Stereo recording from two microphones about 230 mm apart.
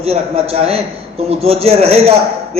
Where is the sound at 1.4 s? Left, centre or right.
Right.